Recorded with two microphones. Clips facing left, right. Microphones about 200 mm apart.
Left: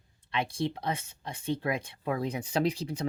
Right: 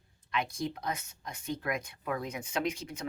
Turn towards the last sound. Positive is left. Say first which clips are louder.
# left 5 dB
turn(degrees=35)  # may be behind; listen again after turning